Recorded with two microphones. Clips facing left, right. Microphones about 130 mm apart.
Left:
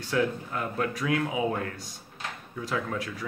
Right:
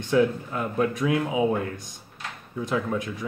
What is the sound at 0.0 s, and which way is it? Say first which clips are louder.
Speech: right 6 dB; 20° right (ahead or behind).